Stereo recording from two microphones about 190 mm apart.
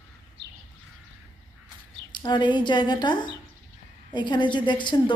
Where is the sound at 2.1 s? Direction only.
25° left (ahead or behind).